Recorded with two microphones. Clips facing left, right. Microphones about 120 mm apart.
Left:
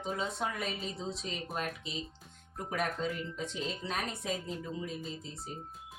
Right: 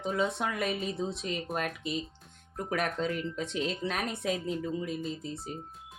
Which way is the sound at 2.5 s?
75° right (ahead or behind).